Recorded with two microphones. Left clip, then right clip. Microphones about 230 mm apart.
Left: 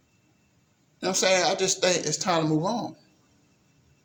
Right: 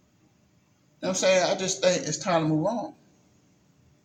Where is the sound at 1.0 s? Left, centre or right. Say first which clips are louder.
Even; left.